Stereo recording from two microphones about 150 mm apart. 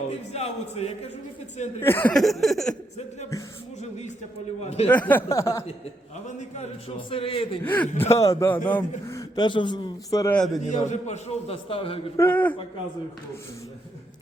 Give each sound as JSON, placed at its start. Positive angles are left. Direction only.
{"t": 0.1, "sound": "a man's voice", "side_deg": 45}
{"t": 1.8, "sound": "speech", "side_deg": 15}
{"t": 2.1, "sound": "a sound", "side_deg": 0}
{"t": 3.8, "sound": "a man's voice", "side_deg": 50}
{"t": 4.9, "sound": "speech", "side_deg": 10}
{"t": 6.9, "sound": "a man's voice", "side_deg": 40}
{"t": 7.6, "sound": "speech", "side_deg": 10}
{"t": 9.0, "sound": "a man's voice", "side_deg": 25}
{"t": 10.3, "sound": "a sound", "side_deg": 0}
{"t": 10.6, "sound": "a man's voice", "side_deg": 50}
{"t": 11.5, "sound": "a man's voice", "side_deg": 35}
{"t": 12.1, "sound": "speech", "side_deg": 15}